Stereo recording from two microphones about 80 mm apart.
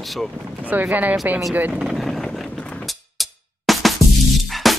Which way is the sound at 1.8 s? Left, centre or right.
Centre.